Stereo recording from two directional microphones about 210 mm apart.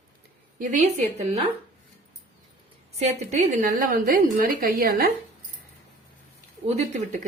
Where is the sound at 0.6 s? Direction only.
35° right (ahead or behind).